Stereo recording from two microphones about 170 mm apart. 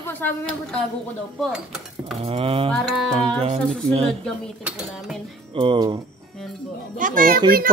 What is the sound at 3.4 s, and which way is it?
Speech, 40° right (ahead or behind).